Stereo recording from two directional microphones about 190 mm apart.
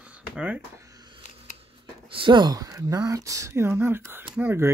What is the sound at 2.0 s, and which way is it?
Speech, 25° right (ahead or behind).